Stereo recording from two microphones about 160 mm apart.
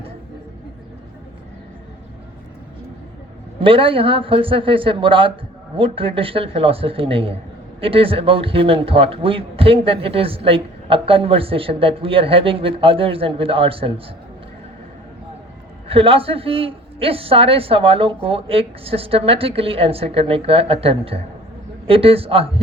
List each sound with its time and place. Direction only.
3.6 s a man's voice: 35° right (ahead or behind)
15.9 s a man's voice: 35° right (ahead or behind)